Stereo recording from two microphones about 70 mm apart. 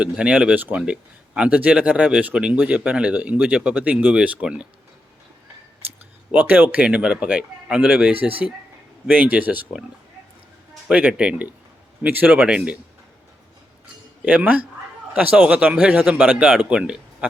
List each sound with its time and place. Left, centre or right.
0.0 s speech: centre
6.3 s speech: right
6.8 s speech: centre
10.8 s speech: centre
12.4 s speech: centre
14.3 s speech: right